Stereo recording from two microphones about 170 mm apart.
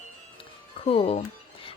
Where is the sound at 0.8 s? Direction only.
35° left (ahead or behind).